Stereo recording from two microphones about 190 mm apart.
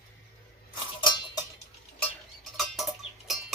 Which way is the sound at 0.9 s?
25° left (ahead or behind).